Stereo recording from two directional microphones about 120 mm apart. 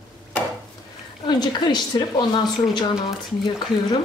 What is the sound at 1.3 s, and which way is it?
A man's voice, 40° left (ahead or behind).